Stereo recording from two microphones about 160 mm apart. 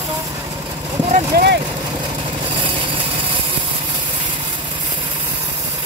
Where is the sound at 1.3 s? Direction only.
80° right.